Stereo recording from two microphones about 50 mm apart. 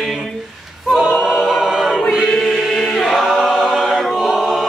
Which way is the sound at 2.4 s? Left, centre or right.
Centre.